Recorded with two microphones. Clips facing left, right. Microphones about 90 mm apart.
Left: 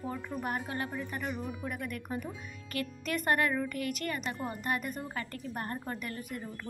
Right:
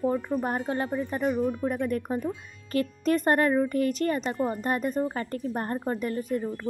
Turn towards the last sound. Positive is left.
turn(degrees=-30)  # may be behind; listen again after turning